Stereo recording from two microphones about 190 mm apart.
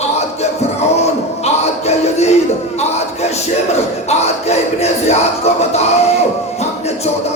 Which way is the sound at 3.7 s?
35° left (ahead or behind).